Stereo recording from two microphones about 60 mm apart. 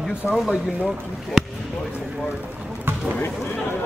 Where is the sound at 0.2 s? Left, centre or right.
Centre.